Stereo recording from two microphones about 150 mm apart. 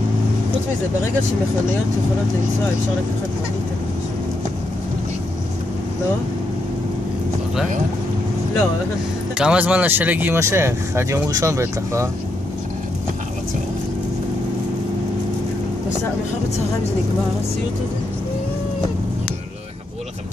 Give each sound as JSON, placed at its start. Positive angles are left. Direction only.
{"t": 9.4, "sound": "speech", "side_deg": -5}